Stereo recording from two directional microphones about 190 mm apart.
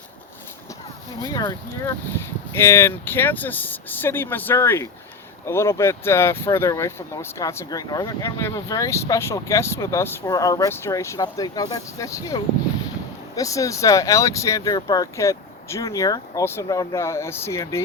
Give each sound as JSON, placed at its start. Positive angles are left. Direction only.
{"t": 1.2, "sound": "speech", "side_deg": 20}